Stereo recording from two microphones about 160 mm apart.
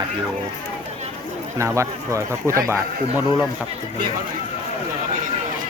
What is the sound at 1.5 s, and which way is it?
Speech, 20° right (ahead or behind).